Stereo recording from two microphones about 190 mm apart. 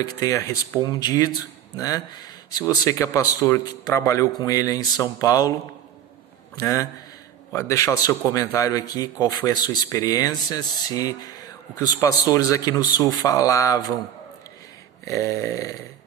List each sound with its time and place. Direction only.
0.0 s a man's voice: 15° left (ahead or behind)
6.5 s a man's voice: 15° left (ahead or behind)
15.0 s speech: 15° left (ahead or behind)